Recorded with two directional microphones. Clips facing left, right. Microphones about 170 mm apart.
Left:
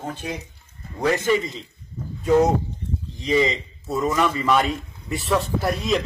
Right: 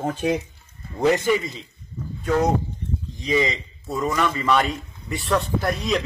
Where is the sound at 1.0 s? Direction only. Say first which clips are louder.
Right 1 dB; 15° right (ahead or behind).